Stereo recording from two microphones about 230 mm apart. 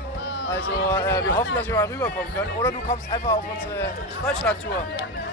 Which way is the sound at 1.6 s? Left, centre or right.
Centre.